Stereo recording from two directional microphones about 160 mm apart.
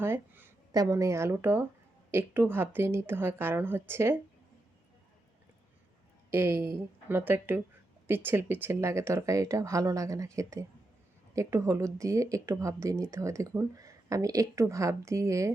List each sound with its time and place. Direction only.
0.0 s a woman's voice: 15° right (ahead or behind)
6.3 s a woman's voice: 15° right (ahead or behind)